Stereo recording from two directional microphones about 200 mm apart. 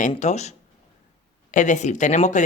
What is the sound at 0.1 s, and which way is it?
Speech, 35° left (ahead or behind).